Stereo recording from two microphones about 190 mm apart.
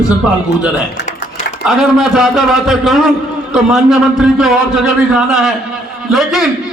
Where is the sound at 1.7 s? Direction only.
Centre (ahead or behind).